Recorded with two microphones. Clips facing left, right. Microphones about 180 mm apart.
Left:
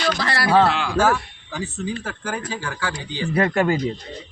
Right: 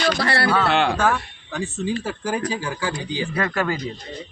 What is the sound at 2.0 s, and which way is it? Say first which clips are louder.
A man's voice: right 4 dB; 10° right (ahead or behind).